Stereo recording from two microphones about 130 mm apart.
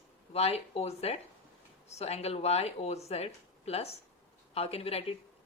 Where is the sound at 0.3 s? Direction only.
55° left (ahead or behind).